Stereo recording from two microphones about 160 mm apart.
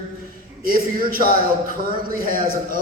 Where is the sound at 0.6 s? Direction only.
65° right (ahead or behind).